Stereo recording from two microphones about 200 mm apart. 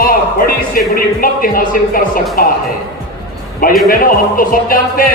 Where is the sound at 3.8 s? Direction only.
45° left (ahead or behind).